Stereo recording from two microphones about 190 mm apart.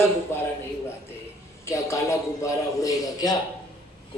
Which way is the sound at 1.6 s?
15° left (ahead or behind).